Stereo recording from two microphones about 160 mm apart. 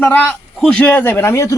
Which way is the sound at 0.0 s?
10° left (ahead or behind).